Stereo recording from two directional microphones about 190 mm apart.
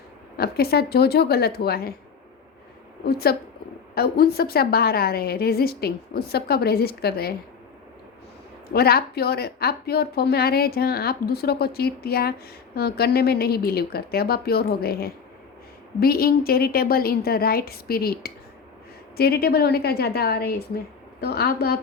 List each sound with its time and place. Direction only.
0.3 s speech: 55° left (ahead or behind)
3.0 s speech: 55° left (ahead or behind)
8.7 s a woman's voice: 55° left (ahead or behind)